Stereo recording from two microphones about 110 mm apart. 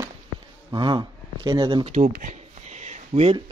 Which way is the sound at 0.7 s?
40° right (ahead or behind).